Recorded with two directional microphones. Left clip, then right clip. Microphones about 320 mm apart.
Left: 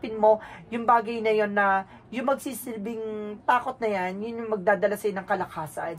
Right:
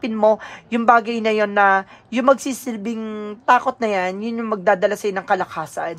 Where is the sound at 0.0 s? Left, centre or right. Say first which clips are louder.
Right 4 dB; right.